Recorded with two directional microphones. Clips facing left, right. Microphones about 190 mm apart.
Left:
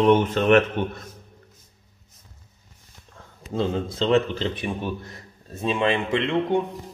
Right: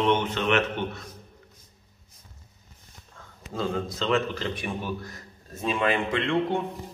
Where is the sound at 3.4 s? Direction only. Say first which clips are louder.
Left 4 dB; 30° left (ahead or behind).